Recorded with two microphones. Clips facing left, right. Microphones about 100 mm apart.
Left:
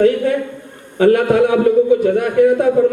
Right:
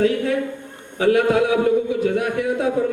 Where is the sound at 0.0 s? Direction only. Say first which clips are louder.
Left 5 dB; 50° left (ahead or behind).